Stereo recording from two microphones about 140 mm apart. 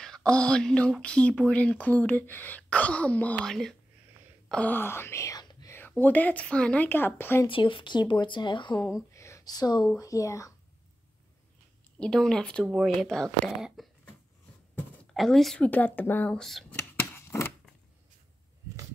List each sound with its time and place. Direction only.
0.0 s speech: 5° left (ahead or behind); by 5.7 s 30° left (ahead or behind)
5.7 s speech: 15° left (ahead or behind)
7.4 s speech: 35° left (ahead or behind)
9.1 s a sound: 20° left (ahead or behind)
9.9 s speech: 25° left (ahead or behind)
12.0 s speech: 5° left (ahead or behind)
15.1 s speech: centre (ahead or behind)
17.1 s a sound: 15° left (ahead or behind)